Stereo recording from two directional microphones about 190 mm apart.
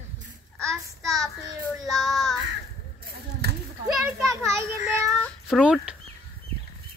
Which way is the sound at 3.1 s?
60° right (ahead or behind).